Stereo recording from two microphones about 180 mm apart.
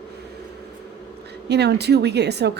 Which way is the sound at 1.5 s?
65° right (ahead or behind).